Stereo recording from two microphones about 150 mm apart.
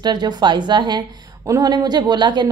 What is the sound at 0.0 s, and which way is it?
A woman's voice, 30° right (ahead or behind).